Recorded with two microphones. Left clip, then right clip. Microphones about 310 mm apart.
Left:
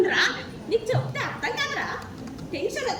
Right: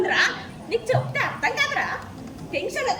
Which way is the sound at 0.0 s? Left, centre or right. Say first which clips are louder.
Right 1 dB; centre.